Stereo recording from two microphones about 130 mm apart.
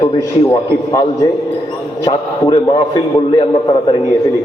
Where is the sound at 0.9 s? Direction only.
25° left (ahead or behind).